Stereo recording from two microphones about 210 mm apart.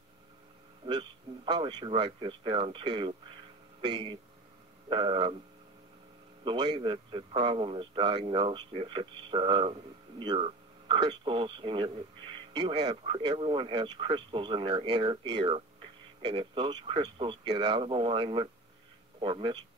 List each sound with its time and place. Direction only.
0.8 s a man's voice: 20° right (ahead or behind)
6.4 s a man's voice: 20° right (ahead or behind)